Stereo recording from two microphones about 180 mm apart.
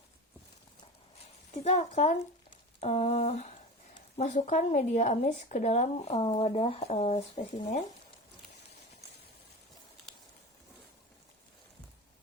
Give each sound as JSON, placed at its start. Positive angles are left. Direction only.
{"t": 1.6, "sound": "speech", "side_deg": 40}